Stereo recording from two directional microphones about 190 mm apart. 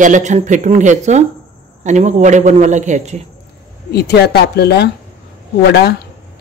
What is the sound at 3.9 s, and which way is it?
Speech, 60° left (ahead or behind).